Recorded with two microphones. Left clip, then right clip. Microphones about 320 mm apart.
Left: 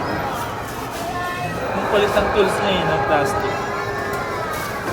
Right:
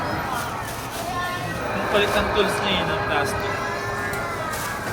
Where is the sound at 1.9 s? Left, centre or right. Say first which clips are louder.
Left 3 dB; centre.